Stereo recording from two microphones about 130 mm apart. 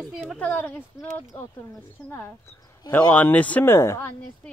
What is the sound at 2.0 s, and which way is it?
Speech, 20° left (ahead or behind).